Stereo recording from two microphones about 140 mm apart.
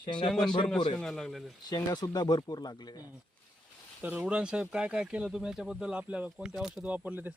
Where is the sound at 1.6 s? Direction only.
30° left (ahead or behind).